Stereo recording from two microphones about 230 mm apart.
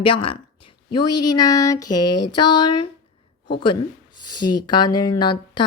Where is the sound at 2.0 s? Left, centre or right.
Left.